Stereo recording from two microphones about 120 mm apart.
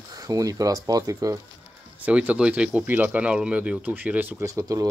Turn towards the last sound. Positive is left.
turn(degrees=-30)  # may be behind; listen again after turning